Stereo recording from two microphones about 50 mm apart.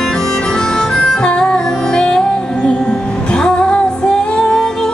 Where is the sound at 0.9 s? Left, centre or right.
Centre.